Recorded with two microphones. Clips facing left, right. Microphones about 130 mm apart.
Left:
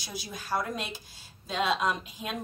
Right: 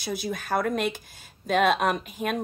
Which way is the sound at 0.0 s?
60° right (ahead or behind).